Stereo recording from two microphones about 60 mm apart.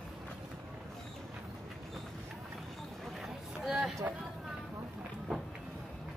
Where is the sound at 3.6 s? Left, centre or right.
Centre.